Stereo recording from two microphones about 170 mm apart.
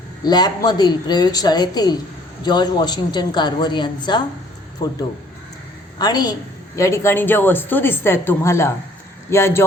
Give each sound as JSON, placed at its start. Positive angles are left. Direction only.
{"t": 0.3, "sound": "a woman's voice", "side_deg": 25}
{"t": 6.0, "sound": "a woman's voice", "side_deg": 25}